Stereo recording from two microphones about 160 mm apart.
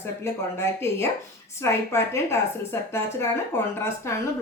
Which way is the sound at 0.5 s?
15° left (ahead or behind).